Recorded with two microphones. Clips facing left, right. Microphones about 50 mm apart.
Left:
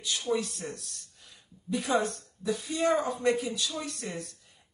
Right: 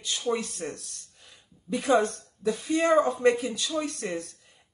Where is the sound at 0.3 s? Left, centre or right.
Right.